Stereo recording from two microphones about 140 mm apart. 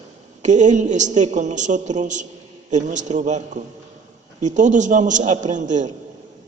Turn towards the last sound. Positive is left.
turn(degrees=-60)  # may be behind; listen again after turning